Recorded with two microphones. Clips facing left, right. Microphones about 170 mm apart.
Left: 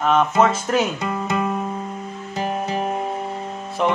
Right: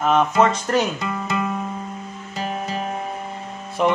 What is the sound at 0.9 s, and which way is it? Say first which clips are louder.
Music: left 2 dB; 20° left (ahead or behind).